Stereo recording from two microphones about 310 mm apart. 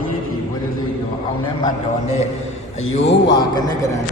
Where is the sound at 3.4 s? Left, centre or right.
Centre.